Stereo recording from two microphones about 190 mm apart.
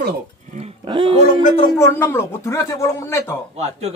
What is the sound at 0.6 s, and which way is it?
Speech, 30° right (ahead or behind).